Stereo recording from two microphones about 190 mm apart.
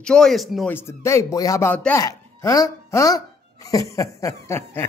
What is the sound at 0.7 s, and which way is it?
A man's voice, 15° left (ahead or behind).